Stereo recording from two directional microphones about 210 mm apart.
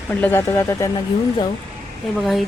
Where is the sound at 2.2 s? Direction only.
Centre (ahead or behind).